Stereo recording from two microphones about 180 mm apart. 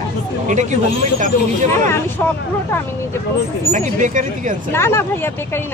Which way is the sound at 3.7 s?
45° right (ahead or behind).